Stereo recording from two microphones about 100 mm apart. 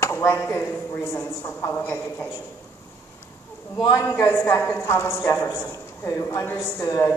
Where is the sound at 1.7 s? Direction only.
20° left (ahead or behind).